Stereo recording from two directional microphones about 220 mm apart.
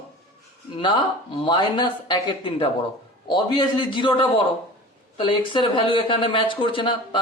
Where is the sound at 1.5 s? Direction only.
20° left (ahead or behind).